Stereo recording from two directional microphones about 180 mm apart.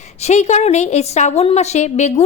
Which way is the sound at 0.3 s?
40° left (ahead or behind).